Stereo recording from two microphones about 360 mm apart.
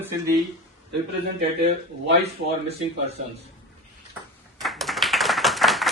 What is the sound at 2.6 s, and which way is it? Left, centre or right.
Speech, centre.